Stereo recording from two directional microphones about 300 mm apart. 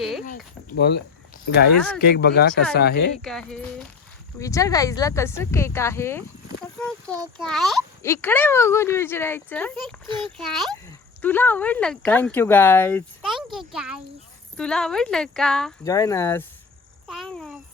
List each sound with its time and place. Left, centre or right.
0.3 s speech: left
3.2 s a child's voice: centre